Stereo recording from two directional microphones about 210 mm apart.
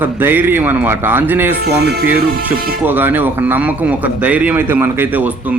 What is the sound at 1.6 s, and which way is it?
Speech, 50° right (ahead or behind).